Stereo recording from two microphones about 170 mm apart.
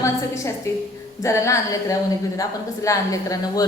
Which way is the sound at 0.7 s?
15° left (ahead or behind).